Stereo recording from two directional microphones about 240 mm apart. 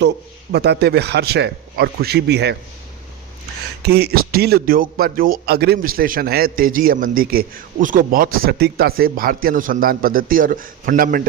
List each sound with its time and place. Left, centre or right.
0.5 s a man's voice: right
3.8 s a man's voice: right